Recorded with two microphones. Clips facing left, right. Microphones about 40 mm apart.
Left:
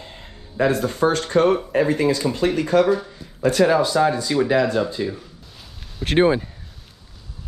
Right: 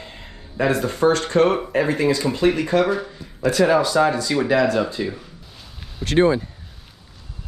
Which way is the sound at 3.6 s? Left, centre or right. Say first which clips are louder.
Even; right.